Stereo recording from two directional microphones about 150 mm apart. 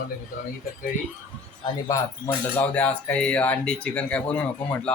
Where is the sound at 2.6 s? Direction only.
10° left (ahead or behind).